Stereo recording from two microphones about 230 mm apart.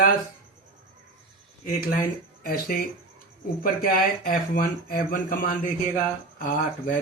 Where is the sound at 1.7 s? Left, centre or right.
Left.